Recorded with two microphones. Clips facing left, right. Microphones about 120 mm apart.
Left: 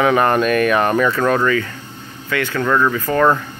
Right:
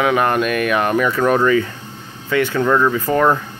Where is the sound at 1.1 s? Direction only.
15° right (ahead or behind).